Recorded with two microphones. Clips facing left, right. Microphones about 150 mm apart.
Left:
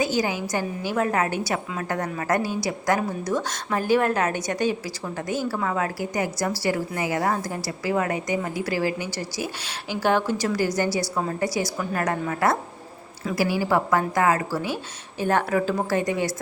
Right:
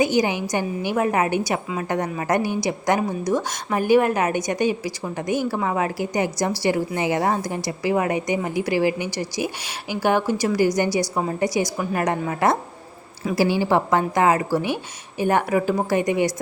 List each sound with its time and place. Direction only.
0.0 s a woman's voice: 15° right (ahead or behind)